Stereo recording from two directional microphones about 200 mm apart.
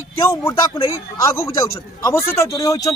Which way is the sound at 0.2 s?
15° left (ahead or behind).